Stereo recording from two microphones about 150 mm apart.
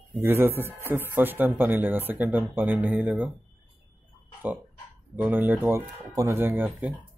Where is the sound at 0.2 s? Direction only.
15° right (ahead or behind).